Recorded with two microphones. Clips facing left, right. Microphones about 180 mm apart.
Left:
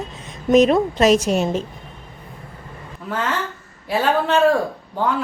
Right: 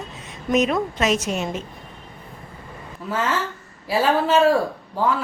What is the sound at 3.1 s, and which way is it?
A man's voice, 5° right (ahead or behind).